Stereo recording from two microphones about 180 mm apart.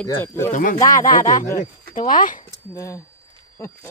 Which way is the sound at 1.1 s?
45° left (ahead or behind).